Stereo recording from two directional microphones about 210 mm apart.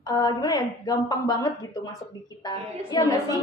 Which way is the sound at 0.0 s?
20° left (ahead or behind).